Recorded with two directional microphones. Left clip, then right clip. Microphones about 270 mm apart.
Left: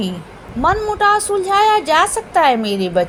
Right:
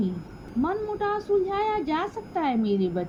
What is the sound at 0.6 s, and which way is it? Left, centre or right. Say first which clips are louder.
A woman's voice: left 13 dB; right.